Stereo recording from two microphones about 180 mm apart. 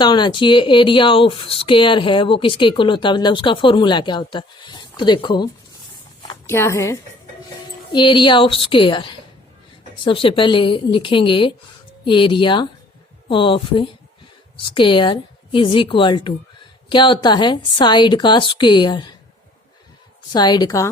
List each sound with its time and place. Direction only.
0.0 s speech: 25° left (ahead or behind)
6.5 s a woman's voice: 15° left (ahead or behind)
7.9 s speech: 25° left (ahead or behind)
20.3 s speech: 25° left (ahead or behind)